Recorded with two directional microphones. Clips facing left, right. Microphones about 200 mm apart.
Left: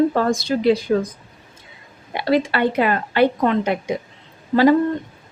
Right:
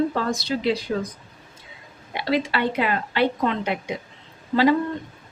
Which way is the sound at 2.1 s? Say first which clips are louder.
Left 5 dB; 50° left (ahead or behind).